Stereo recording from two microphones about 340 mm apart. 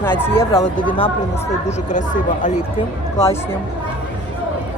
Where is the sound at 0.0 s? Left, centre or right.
Centre; by 2.6 s left.